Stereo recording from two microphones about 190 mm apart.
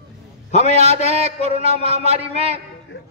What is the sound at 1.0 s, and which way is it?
Speech, 35° right (ahead or behind).